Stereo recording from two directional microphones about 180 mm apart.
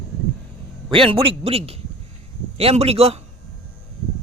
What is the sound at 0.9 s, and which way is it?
A man's voice, 30° right (ahead or behind).